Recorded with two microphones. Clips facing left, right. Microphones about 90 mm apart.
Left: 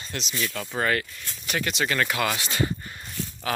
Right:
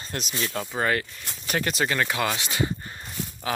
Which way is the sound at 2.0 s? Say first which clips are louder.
Even; 15° right (ahead or behind).